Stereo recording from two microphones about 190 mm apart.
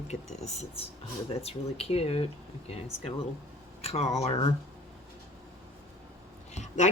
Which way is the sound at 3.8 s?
35° left (ahead or behind).